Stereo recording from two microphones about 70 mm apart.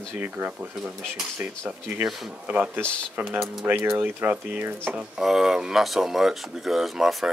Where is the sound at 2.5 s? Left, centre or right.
Right.